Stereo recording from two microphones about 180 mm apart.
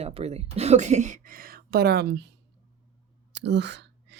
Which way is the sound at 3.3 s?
75° right (ahead or behind).